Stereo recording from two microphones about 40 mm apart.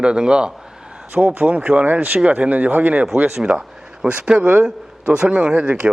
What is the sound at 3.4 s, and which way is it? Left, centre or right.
Speech, right.